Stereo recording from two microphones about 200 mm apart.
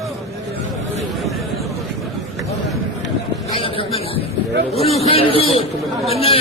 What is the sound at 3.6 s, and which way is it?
A man's voice, 30° left (ahead or behind).